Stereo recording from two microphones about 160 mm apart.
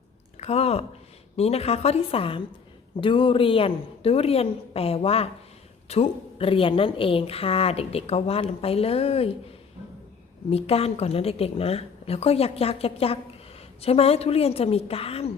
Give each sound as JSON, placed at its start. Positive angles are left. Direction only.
{"t": 0.3, "sound": "a sound", "side_deg": 40}
{"t": 1.4, "sound": "a woman's voice", "side_deg": 40}
{"t": 10.5, "sound": "a woman's voice", "side_deg": 40}